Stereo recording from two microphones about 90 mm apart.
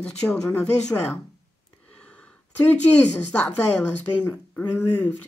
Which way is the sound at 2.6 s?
15° left (ahead or behind).